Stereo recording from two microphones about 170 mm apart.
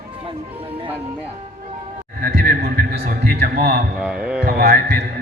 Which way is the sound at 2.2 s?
65° right (ahead or behind).